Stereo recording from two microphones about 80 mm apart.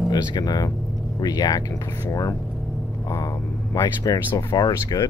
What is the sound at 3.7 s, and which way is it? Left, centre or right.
Speech, left.